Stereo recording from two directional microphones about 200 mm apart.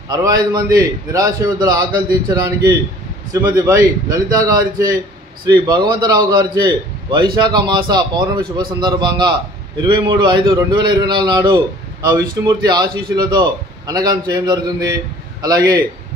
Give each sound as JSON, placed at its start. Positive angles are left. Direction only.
{"t": 0.1, "sound": "a man's voice", "side_deg": -20}